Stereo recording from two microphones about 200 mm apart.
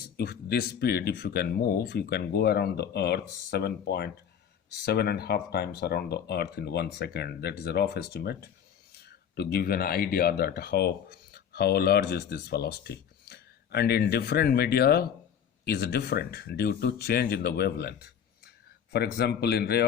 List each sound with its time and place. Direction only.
0.2 s speech: 50° left (ahead or behind)